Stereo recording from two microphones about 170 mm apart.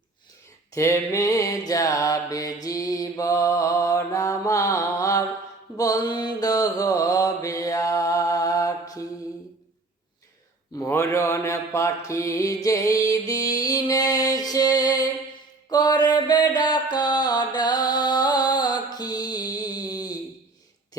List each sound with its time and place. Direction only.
0.7 s mantra: 15° left (ahead or behind)
10.8 s mantra: 15° left (ahead or behind)
15.7 s music: 25° left (ahead or behind)